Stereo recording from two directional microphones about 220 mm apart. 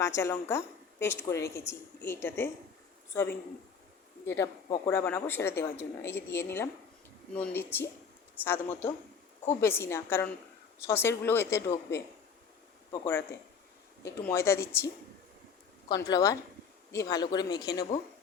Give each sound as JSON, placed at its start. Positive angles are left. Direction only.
{"t": 0.0, "sound": "a woman's voice", "side_deg": 15}
{"t": 1.4, "sound": "speech", "side_deg": 45}
{"t": 2.0, "sound": "speech", "side_deg": 10}
{"t": 12.9, "sound": "speech", "side_deg": 10}
{"t": 15.9, "sound": "speech", "side_deg": 15}